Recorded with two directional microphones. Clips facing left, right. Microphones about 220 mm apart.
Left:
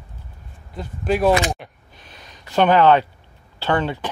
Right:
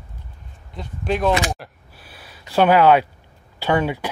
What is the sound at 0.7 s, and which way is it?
Speech, 5° left (ahead or behind).